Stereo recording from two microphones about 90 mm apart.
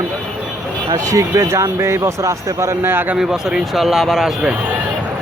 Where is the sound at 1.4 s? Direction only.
30° right (ahead or behind).